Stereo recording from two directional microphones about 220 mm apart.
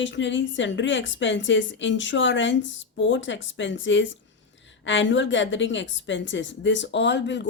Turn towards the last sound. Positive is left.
turn(degrees=55)  # may be behind; listen again after turning